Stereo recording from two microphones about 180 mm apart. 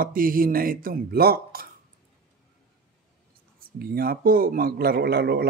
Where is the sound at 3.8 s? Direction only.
55° right (ahead or behind).